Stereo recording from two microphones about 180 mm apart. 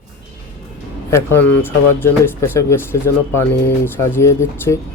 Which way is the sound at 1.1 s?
10° left (ahead or behind).